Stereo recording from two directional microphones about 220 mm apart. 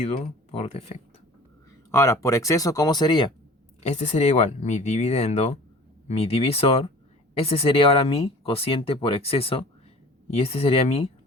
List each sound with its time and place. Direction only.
0.0 s speech: 30° left (ahead or behind)
1.9 s speech: 15° left (ahead or behind)